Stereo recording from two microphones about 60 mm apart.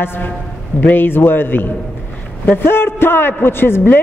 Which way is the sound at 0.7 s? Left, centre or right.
Left.